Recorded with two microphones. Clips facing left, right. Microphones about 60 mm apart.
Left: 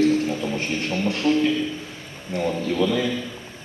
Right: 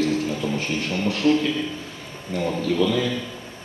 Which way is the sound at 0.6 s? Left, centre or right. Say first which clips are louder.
Even; left.